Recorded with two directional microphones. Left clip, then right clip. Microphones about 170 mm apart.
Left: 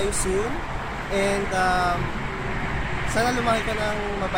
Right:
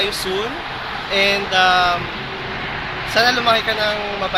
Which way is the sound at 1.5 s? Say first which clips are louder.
Right 9 dB; 15° right (ahead or behind).